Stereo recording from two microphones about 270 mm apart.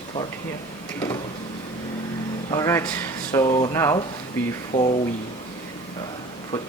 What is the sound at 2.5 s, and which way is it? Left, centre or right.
Speech, centre.